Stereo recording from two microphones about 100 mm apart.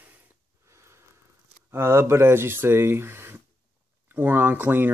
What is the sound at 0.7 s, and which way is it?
Snort, 25° right (ahead or behind).